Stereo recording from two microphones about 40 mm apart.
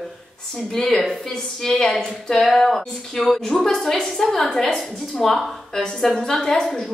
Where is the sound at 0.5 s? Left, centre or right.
Centre.